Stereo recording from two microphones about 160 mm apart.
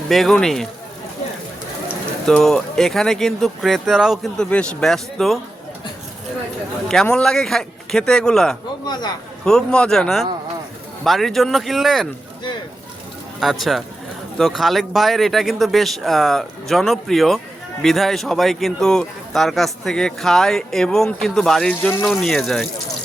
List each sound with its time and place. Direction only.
0.1 s speech: centre (ahead or behind)
2.2 s speech: 5° left (ahead or behind)
6.8 s speech: 5° left (ahead or behind)
8.9 s a man's voice: 25° left (ahead or behind)
9.4 s speech: 5° left (ahead or behind)
13.4 s speech: centre (ahead or behind)